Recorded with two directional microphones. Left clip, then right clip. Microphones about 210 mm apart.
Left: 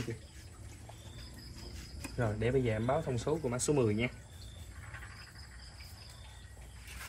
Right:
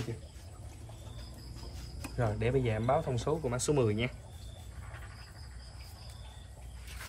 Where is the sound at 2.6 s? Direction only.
20° left (ahead or behind).